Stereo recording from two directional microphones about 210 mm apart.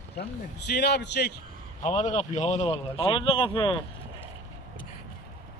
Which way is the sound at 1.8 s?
35° left (ahead or behind).